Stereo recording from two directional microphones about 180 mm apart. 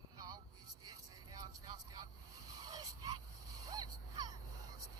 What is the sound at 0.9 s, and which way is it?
Vehicle, 20° right (ahead or behind).